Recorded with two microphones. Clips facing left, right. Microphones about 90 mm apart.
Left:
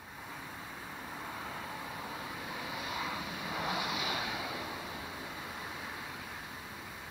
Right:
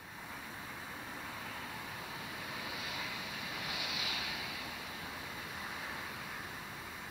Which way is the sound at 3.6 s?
35° left (ahead or behind).